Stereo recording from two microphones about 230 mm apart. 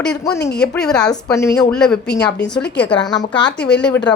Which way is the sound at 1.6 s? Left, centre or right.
Centre.